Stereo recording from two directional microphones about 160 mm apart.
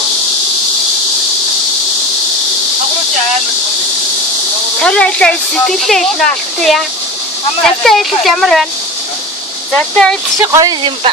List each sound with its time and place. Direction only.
4.8 s speech: 5° left (ahead or behind)
7.9 s speech: centre (ahead or behind)
9.7 s speech: 5° left (ahead or behind)
10.4 s speech: 20° right (ahead or behind)